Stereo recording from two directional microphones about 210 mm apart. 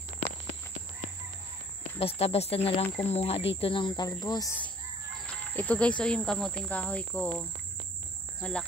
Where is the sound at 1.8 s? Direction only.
30° left (ahead or behind).